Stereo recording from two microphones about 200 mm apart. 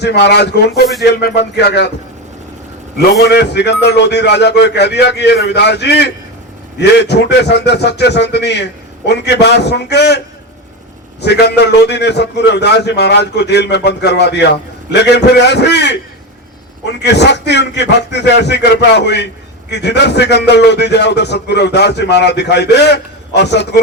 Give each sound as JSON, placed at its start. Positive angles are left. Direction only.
{"t": 0.0, "sound": "a man's voice", "side_deg": 55}
{"t": 3.1, "sound": "a man's voice", "side_deg": 55}
{"t": 11.2, "sound": "a man's voice", "side_deg": 55}